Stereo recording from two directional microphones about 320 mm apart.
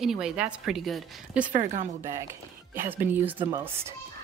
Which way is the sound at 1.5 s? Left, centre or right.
Right.